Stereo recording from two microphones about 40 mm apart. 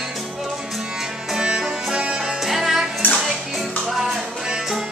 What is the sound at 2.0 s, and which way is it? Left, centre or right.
Music, right.